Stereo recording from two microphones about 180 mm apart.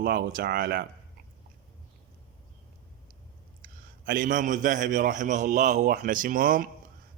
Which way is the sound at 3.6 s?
50° right (ahead or behind).